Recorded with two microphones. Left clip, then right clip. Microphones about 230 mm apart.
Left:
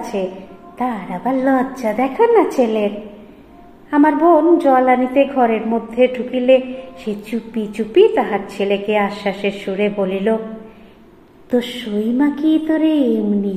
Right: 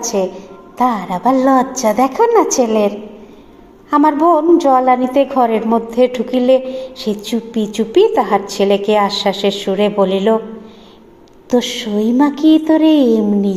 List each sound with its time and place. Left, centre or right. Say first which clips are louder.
0.7 s a woman's voice: right 7 dB; right
3.9 s a woman's voice: right 1 dB; right
11.5 s a woman's voice: right 4 dB; right